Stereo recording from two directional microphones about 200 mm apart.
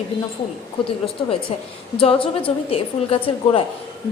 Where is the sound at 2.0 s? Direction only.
25° left (ahead or behind).